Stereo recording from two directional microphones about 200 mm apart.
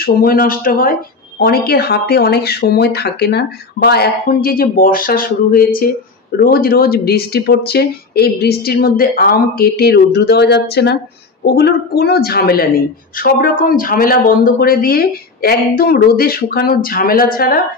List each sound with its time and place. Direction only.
0.0 s speech: 45° left (ahead or behind)